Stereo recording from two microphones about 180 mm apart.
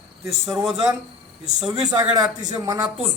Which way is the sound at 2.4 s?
20° right (ahead or behind).